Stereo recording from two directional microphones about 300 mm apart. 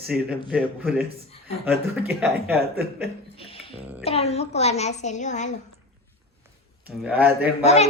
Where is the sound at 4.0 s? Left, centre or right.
Centre.